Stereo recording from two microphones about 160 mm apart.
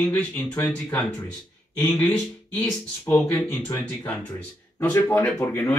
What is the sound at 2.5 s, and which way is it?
Speech, 5° left (ahead or behind).